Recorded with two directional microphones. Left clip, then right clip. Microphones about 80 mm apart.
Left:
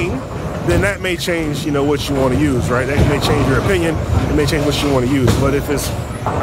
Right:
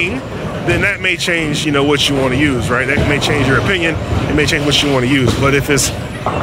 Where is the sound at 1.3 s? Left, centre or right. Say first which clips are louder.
Right 4 dB; centre.